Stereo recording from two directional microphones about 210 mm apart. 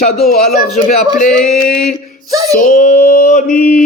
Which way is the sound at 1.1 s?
40° left (ahead or behind).